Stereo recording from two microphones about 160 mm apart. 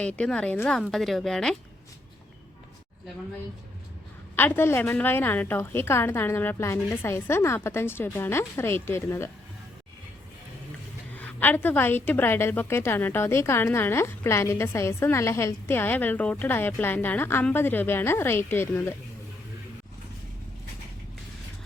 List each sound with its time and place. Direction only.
0.0 s a woman's voice: 5° left (ahead or behind)
4.4 s a woman's voice: 15° left (ahead or behind)
11.1 s a woman's voice: 10° left (ahead or behind)